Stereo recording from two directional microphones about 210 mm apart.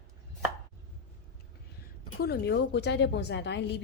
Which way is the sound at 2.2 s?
50° left (ahead or behind).